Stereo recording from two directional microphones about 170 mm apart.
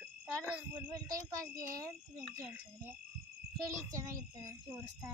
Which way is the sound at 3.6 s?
20° right (ahead or behind).